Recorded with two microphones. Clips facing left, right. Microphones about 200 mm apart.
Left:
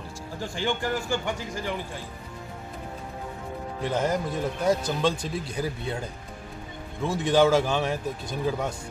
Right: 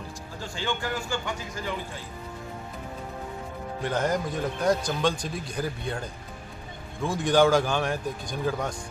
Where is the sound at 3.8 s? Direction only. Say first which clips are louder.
Left 1 dB; 5° left (ahead or behind).